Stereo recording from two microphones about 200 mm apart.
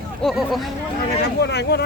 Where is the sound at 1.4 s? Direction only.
55° left (ahead or behind).